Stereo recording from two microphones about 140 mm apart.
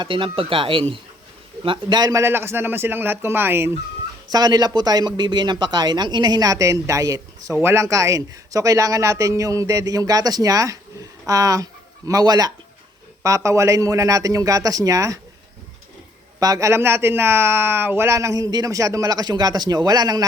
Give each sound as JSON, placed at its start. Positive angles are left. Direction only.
{"t": 0.0, "sound": "a man's voice", "side_deg": -35}
{"t": 4.3, "sound": "speech", "side_deg": -30}
{"t": 16.4, "sound": "speech", "side_deg": -25}